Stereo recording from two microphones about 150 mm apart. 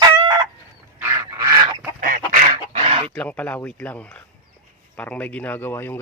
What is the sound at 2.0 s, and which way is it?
Chicken, 65° right (ahead or behind).